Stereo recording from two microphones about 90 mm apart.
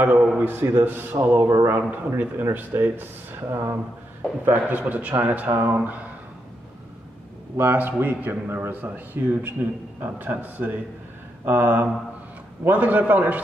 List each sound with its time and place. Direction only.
0.0 s a man's voice: 20° right (ahead or behind)
7.5 s a man's voice: 20° right (ahead or behind)